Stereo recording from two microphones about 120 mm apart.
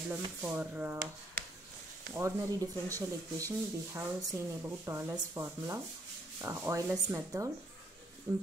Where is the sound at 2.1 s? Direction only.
25° right (ahead or behind).